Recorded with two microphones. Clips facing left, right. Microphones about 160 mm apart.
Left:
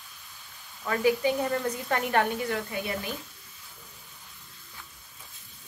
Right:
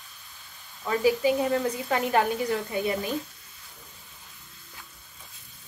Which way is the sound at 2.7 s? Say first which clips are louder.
Right 5 dB; 25° right (ahead or behind).